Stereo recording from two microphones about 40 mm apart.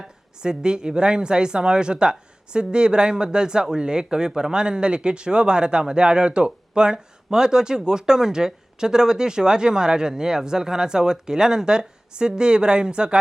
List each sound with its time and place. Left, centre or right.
0.3 s speech: centre